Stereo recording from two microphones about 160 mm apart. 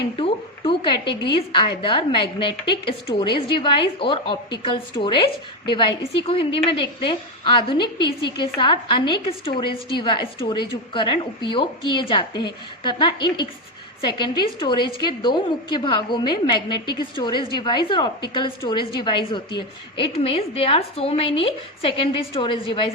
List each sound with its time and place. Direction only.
0.2 s a woman's voice: 35° left (ahead or behind)